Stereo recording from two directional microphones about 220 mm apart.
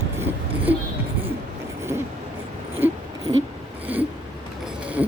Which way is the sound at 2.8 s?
10° right (ahead or behind).